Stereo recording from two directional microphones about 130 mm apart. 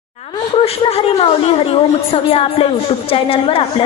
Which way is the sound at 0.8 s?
50° left (ahead or behind).